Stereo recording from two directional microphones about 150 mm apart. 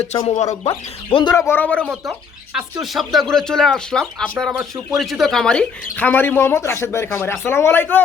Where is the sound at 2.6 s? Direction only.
5° right (ahead or behind).